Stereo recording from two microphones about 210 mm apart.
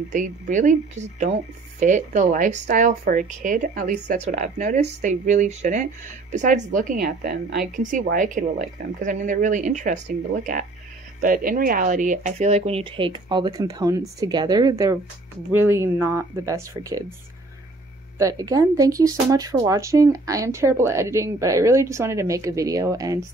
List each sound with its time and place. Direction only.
0.1 s a woman's voice: 35° right (ahead or behind); by 17.0 s 15° right (ahead or behind)
18.1 s speech: 15° right (ahead or behind)